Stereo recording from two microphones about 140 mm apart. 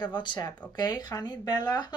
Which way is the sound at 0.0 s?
35° left (ahead or behind).